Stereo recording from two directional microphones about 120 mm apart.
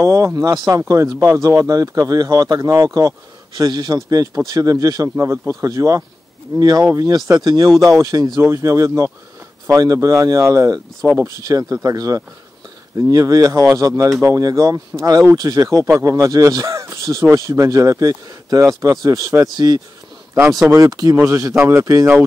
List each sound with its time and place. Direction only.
0.0 s speech: 25° right (ahead or behind)